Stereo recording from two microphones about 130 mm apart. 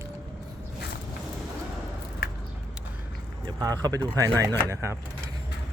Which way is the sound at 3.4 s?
30° right (ahead or behind).